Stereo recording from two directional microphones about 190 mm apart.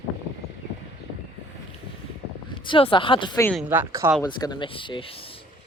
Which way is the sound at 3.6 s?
10° right (ahead or behind).